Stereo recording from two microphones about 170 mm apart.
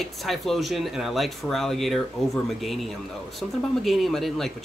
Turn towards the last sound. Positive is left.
turn(degrees=0)  # may be behind; listen again after turning